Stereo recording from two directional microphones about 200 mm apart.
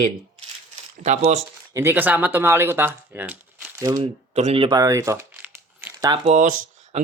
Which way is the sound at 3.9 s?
35° right (ahead or behind).